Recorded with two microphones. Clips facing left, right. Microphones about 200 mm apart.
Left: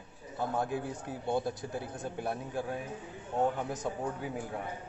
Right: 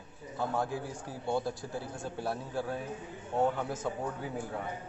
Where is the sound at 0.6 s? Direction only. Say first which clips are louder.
Left 1 dB; 20° left (ahead or behind).